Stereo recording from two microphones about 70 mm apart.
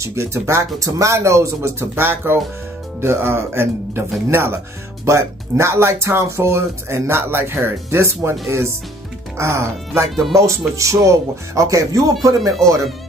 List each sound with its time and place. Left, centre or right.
0.0 s speech: right
2.0 s speech: right